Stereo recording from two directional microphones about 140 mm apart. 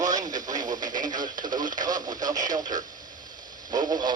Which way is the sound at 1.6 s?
65° right (ahead or behind).